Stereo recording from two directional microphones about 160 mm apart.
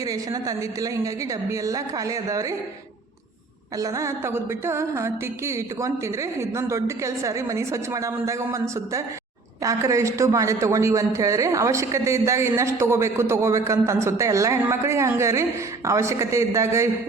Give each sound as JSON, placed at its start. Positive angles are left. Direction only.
{"t": 0.0, "sound": "speech", "side_deg": -20}
{"t": 3.8, "sound": "a man's voice", "side_deg": -20}